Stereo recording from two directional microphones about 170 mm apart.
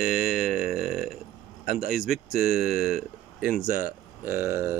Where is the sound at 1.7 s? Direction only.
60° left (ahead or behind).